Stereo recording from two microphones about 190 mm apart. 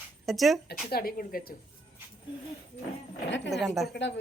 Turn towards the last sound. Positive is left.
turn(degrees=0)  # may be behind; listen again after turning